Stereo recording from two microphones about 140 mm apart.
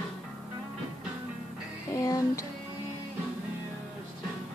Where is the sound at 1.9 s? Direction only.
25° left (ahead or behind).